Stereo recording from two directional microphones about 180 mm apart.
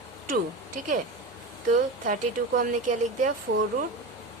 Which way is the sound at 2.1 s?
45° right (ahead or behind).